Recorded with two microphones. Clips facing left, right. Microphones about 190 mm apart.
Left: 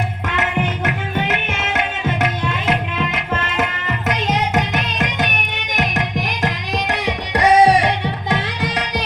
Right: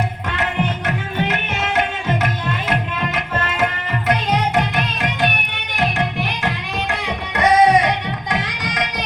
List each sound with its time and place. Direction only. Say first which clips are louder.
5.7 s tabla: right 1 dB; 40° left (ahead or behind)
7.0 s music: left 1 dB; 35° left (ahead or behind)